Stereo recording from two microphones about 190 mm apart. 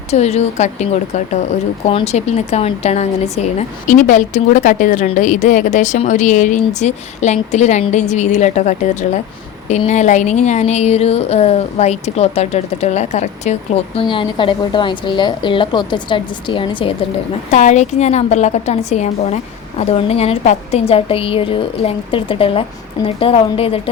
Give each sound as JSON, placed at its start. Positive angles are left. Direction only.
{"t": 0.1, "sound": "speech", "side_deg": 35}
{"t": 17.5, "sound": "speech", "side_deg": 40}